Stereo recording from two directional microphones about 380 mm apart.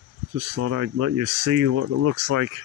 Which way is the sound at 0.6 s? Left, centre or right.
Right.